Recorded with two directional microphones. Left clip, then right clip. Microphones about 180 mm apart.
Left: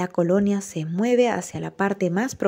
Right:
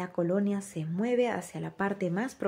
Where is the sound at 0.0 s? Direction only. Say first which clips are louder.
Left 9 dB; 35° left (ahead or behind).